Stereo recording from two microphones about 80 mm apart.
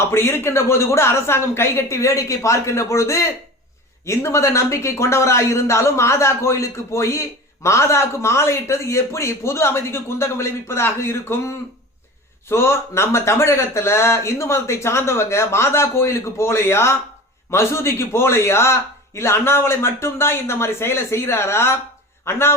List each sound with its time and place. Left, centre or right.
0.0 s a man's voice: left